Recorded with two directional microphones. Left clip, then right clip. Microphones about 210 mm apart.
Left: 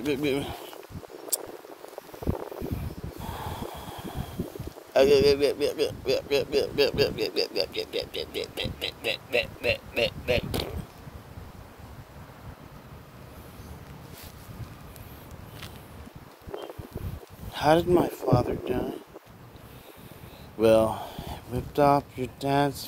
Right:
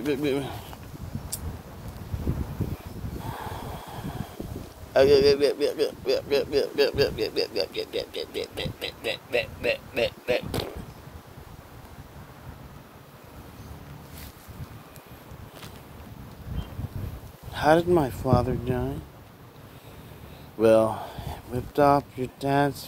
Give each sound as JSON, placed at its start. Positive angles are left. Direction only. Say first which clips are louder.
{"t": 0.0, "sound": "speech", "louder": "right 1 dB", "side_deg": 5}
{"t": 3.3, "sound": "gasp", "louder": "even", "side_deg": 0}
{"t": 4.9, "sound": "a man's voice", "louder": "right 1 dB", "side_deg": 5}
{"t": 17.5, "sound": "a man's voice", "louder": "right 1 dB", "side_deg": 0}
{"t": 20.5, "sound": "speech", "louder": "right 1 dB", "side_deg": 0}